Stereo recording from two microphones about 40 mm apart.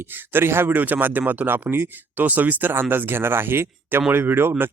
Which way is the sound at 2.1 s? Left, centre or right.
Right.